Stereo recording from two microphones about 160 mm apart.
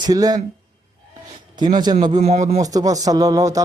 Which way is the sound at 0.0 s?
25° right (ahead or behind).